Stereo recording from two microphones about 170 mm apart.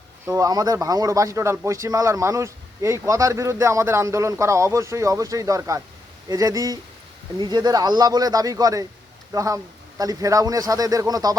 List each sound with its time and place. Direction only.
0.3 s speech: 20° right (ahead or behind)